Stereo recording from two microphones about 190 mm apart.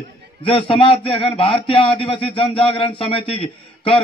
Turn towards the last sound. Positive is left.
turn(degrees=30)  # may be behind; listen again after turning